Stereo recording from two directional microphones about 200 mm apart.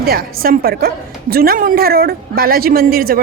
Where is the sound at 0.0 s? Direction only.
50° right (ahead or behind).